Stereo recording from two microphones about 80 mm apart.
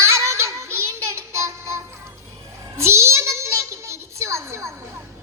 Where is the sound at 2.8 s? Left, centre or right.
Right.